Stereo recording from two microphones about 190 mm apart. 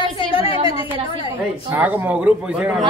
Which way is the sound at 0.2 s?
25° left (ahead or behind).